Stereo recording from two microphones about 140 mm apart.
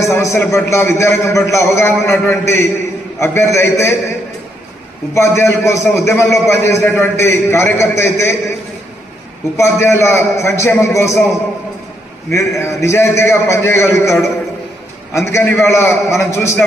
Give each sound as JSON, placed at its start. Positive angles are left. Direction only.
{"t": 0.0, "sound": "a man's voice", "side_deg": 20}
{"t": 5.1, "sound": "a man's voice", "side_deg": 20}
{"t": 9.6, "sound": "a man's voice", "side_deg": 20}
{"t": 12.3, "sound": "a man's voice", "side_deg": 20}
{"t": 15.3, "sound": "a man's voice", "side_deg": 20}